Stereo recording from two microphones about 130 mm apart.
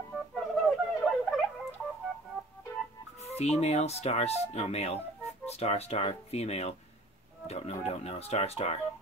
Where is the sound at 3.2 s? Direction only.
55° left (ahead or behind).